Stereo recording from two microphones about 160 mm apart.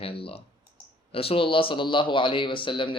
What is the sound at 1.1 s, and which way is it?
Speech, 35° left (ahead or behind).